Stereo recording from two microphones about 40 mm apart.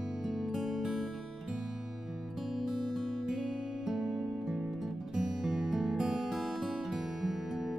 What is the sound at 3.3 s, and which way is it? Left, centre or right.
Music, centre.